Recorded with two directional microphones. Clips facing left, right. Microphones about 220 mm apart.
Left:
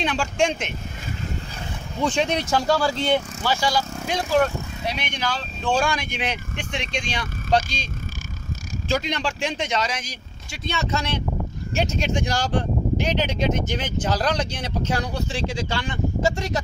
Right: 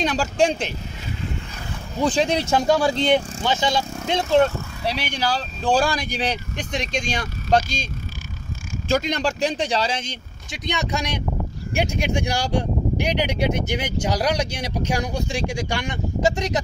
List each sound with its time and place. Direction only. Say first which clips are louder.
0.0 s speech: right 3 dB; 40° right (ahead or behind)
2.0 s speech: right 2 dB; 35° right (ahead or behind)
4.8 s speech: right 4 dB; 35° right (ahead or behind); by 16.6 s 15° right (ahead or behind)